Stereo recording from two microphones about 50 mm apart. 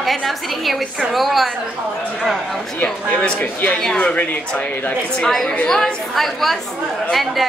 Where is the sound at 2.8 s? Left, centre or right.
Left.